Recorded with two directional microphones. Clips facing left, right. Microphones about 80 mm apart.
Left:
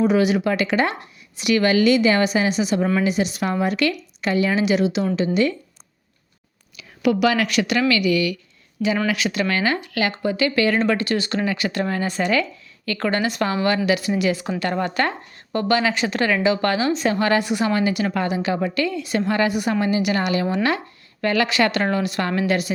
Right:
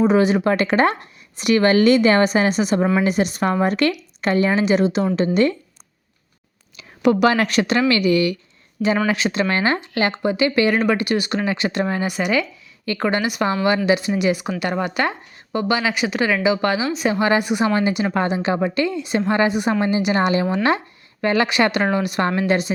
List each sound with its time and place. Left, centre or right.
0.0 s a woman's voice: right
6.7 s a woman's voice: right